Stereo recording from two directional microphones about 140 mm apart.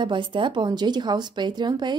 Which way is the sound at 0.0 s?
35° right (ahead or behind).